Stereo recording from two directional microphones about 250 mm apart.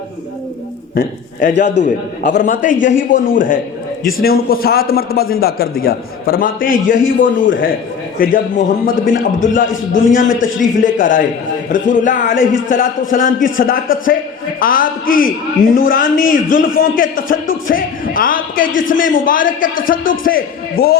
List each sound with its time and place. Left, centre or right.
0.9 s a man's voice: left
7.0 s a man's voice: left
8.2 s a man's voice: left